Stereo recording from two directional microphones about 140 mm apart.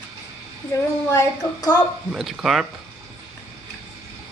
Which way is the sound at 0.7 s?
20° left (ahead or behind).